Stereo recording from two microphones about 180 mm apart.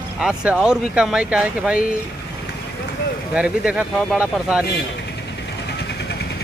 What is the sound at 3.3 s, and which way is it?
Speech, 5° right (ahead or behind).